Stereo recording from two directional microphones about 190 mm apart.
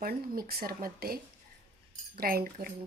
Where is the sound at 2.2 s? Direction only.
50° right (ahead or behind).